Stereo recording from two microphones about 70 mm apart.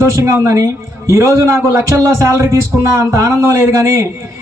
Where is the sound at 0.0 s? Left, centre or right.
Right.